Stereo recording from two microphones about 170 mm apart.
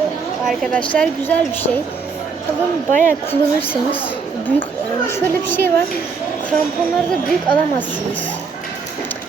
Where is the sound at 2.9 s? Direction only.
50° right (ahead or behind).